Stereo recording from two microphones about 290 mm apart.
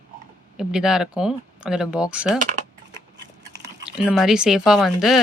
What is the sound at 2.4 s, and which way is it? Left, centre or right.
Speech, right.